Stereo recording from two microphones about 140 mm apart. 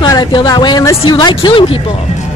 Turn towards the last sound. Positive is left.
turn(degrees=40)  # may be behind; listen again after turning